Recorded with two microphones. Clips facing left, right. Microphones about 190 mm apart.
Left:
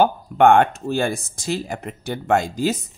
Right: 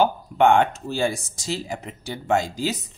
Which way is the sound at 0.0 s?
55° left (ahead or behind).